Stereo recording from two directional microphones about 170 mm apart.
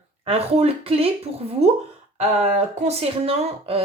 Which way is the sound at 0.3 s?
35° right (ahead or behind).